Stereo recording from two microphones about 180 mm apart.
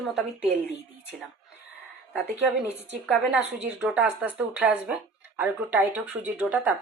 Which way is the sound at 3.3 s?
5° right (ahead or behind).